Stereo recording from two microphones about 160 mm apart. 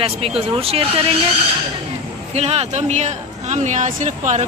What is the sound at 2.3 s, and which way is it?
Speech, 40° right (ahead or behind).